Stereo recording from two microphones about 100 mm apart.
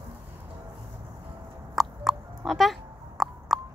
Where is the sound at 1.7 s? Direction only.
Centre (ahead or behind).